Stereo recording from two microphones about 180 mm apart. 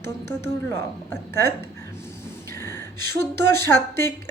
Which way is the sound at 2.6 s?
15° left (ahead or behind).